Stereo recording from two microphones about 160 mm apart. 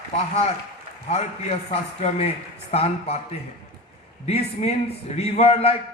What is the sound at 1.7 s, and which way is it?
A man's voice, 40° left (ahead or behind).